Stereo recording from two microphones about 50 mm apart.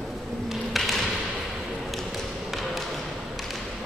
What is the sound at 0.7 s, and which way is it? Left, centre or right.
Tap, centre.